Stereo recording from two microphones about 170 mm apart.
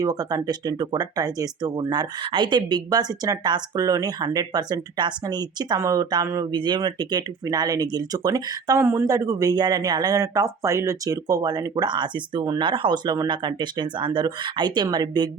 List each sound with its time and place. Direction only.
0.0 s speech: 20° right (ahead or behind)